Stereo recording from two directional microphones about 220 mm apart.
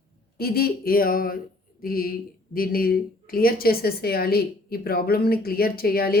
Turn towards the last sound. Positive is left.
turn(degrees=45)  # may be behind; listen again after turning